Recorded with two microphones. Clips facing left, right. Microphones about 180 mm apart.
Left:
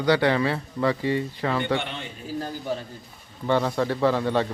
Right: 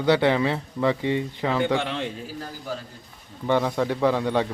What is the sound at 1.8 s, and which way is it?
Speech, 90° right.